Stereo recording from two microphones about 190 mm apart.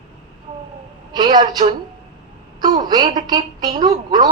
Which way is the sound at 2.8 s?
20° right (ahead or behind).